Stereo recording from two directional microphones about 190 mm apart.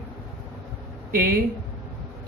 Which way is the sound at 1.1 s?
50° right (ahead or behind).